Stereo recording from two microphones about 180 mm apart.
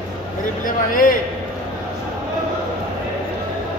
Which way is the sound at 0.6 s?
50° left (ahead or behind).